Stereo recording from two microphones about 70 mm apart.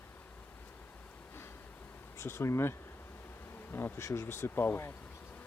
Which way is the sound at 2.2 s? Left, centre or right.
Left.